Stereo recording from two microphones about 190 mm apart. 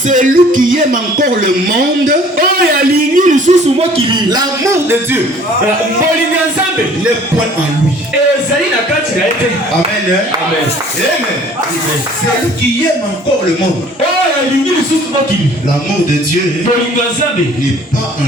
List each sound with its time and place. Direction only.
0.1 s a man's voice: 45° right (ahead or behind); by 5.2 s 15° right (ahead or behind)